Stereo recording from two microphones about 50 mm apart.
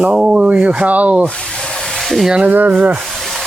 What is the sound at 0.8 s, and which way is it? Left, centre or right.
Speech, right.